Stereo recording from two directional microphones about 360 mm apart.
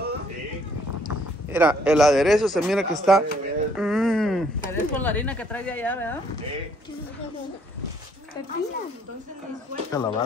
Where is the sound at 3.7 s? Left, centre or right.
Centre.